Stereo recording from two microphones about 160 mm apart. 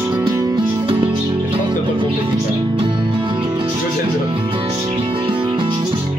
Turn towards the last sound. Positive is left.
turn(degrees=-30)  # may be behind; listen again after turning